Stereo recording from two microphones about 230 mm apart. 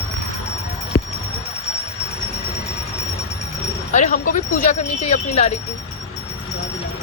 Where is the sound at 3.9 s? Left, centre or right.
Left.